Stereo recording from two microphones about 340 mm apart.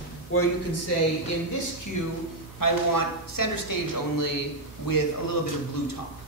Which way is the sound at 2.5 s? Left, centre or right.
Left.